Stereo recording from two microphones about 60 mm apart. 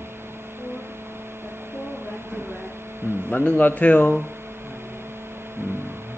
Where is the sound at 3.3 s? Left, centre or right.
Left.